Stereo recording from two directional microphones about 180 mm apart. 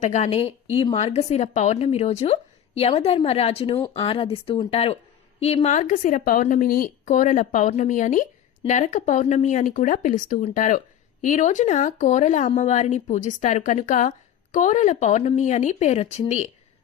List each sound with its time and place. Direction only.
0.0 s a woman's voice: 40° left (ahead or behind)